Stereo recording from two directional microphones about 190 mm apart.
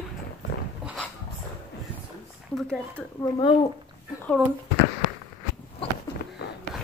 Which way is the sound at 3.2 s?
25° left (ahead or behind).